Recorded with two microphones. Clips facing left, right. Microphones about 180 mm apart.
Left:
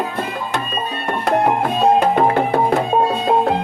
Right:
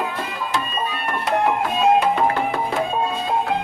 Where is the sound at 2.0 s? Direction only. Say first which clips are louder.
Left 4 dB; 40° left (ahead or behind).